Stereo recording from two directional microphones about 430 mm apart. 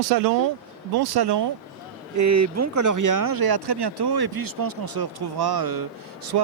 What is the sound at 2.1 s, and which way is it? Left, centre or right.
Speech, right.